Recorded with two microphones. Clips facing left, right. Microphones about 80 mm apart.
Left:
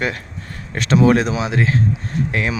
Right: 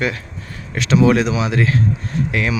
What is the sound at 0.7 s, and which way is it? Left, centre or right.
Speech, left.